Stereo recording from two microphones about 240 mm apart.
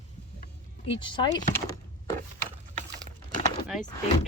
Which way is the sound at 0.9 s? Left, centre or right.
Centre.